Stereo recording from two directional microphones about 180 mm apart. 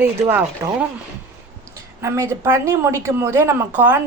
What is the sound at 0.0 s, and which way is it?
Speech, 10° right (ahead or behind).